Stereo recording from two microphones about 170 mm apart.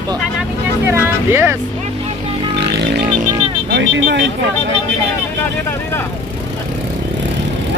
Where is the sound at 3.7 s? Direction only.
90° right.